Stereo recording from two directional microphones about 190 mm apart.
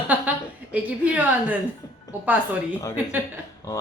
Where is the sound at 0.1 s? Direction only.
10° right (ahead or behind).